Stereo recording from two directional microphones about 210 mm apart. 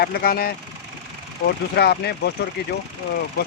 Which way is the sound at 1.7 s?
50° left (ahead or behind).